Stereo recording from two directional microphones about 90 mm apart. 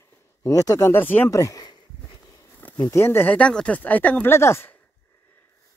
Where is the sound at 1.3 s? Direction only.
40° left (ahead or behind).